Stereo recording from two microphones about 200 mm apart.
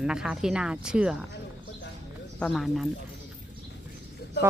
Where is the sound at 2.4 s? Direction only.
Centre (ahead or behind).